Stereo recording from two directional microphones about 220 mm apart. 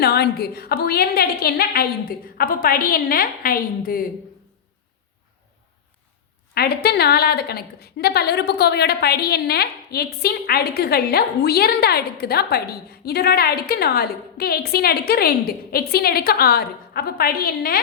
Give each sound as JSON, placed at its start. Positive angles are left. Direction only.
{"t": 0.0, "sound": "a woman's voice", "side_deg": 45}
{"t": 6.5, "sound": "a woman's voice", "side_deg": 45}